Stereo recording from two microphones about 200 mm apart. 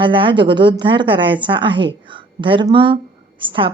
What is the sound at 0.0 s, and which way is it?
Speech, 25° right (ahead or behind).